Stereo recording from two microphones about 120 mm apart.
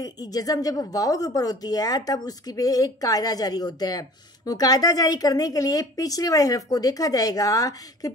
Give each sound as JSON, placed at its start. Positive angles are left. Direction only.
{"t": 0.0, "sound": "speech", "side_deg": 30}